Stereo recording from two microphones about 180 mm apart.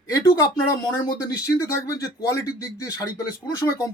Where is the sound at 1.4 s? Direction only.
20° left (ahead or behind).